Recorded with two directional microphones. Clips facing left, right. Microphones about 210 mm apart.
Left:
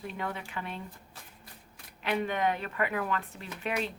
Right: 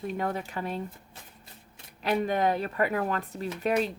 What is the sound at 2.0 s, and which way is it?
Speech, 40° right (ahead or behind).